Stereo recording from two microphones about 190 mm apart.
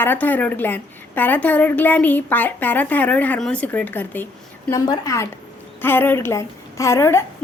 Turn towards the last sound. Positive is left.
turn(degrees=15)  # may be behind; listen again after turning